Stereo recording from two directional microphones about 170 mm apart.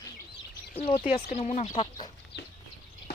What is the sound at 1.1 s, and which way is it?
Speech, 35° left (ahead or behind).